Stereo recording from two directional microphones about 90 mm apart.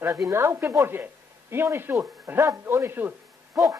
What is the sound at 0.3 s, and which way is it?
Speech, 30° right (ahead or behind).